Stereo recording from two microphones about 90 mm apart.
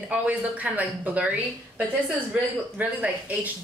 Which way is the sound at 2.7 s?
15° right (ahead or behind).